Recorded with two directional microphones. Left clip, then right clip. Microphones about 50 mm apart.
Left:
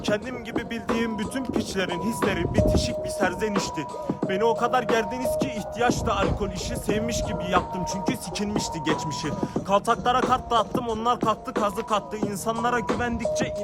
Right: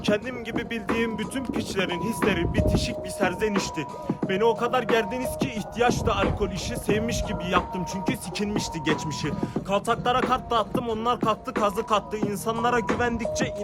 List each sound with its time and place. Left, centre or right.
0.0 s music: centre
0.9 s speech: left
2.0 s music: centre
2.6 s speech: left
3.4 s music: centre
4.2 s speech: centre
4.6 s speech: left
5.4 s music: centre
8.0 s speech: left
9.4 s speech: left
11.3 s music: centre